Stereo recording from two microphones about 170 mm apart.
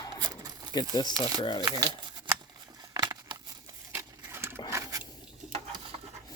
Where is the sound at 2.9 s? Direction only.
20° right (ahead or behind).